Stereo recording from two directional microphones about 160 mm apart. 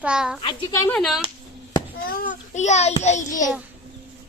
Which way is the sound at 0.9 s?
5° left (ahead or behind).